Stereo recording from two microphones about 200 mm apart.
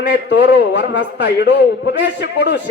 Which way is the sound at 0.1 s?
60° left (ahead or behind).